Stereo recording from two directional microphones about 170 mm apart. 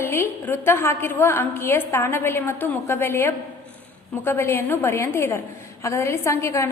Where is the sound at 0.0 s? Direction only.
15° left (ahead or behind).